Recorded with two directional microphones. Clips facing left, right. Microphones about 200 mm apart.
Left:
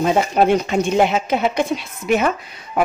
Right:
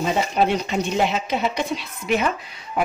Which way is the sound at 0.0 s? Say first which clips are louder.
Left 5 dB; 50° left (ahead or behind).